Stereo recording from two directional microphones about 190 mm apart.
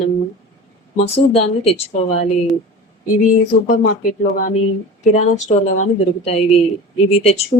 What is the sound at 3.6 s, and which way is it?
Speech, 50° left (ahead or behind).